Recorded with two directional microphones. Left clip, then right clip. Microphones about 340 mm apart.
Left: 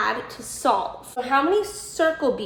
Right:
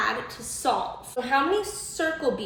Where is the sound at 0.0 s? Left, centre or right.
Centre.